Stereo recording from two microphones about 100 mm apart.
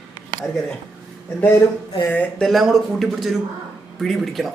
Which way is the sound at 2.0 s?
15° left (ahead or behind).